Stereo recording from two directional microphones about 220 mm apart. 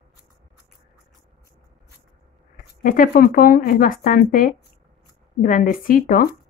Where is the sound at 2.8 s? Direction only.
40° left (ahead or behind).